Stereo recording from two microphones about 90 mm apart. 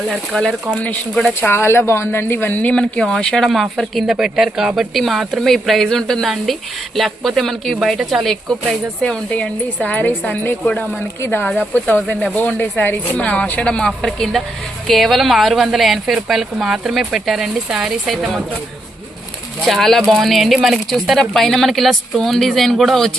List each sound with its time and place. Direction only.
0.1 s speech: 10° left (ahead or behind)
1.4 s speech: 25° left (ahead or behind); by 18.4 s centre (ahead or behind)
19.6 s speech: centre (ahead or behind)